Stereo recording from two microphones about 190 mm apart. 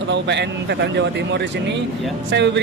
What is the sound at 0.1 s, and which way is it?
Speech, 65° right (ahead or behind).